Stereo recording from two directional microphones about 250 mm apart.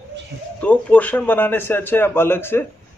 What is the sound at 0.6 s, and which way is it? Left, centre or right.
A man's voice, centre.